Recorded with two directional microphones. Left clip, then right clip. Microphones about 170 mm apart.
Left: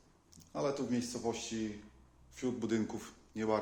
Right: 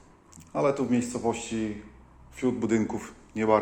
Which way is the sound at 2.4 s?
15° left (ahead or behind).